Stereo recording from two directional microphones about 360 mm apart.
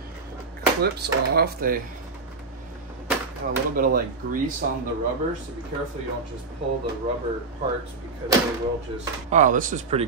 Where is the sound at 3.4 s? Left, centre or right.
Right.